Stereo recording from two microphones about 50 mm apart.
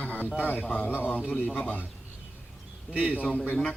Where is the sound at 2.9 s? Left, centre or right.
Right.